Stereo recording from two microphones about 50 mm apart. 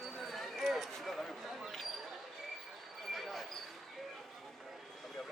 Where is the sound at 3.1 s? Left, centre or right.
Centre.